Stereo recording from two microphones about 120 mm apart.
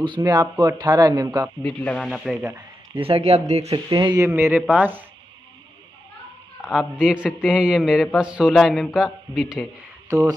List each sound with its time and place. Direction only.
0.2 s speech: 35° right (ahead or behind)
1.6 s a man's voice: 5° left (ahead or behind)
2.4 s a sound: 20° right (ahead or behind)
3.0 s speech: 50° right (ahead or behind)
3.7 s speech: 35° right (ahead or behind)
4.3 s speech: 20° right (ahead or behind)
6.6 s a man's voice: 5° right (ahead or behind)
10.0 s speech: 25° right (ahead or behind)